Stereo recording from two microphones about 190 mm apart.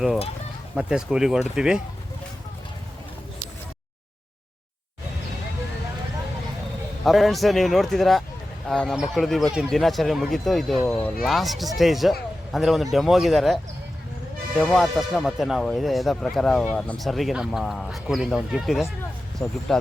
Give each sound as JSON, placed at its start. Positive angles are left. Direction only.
{"t": 0.8, "sound": "speech", "side_deg": -5}
{"t": 7.0, "sound": "speech", "side_deg": 0}